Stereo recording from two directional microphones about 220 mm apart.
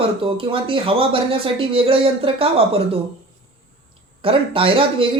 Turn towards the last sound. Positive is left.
turn(degrees=-25)  # may be behind; listen again after turning